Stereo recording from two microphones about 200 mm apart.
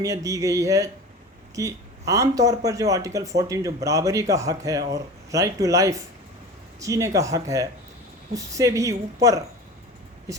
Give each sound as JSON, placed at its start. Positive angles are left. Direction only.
{"t": 0.0, "sound": "a man's voice", "side_deg": -15}
{"t": 10.3, "sound": "speech", "side_deg": -15}